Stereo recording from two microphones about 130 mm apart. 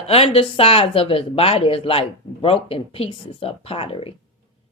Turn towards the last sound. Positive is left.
turn(degrees=45)  # may be behind; listen again after turning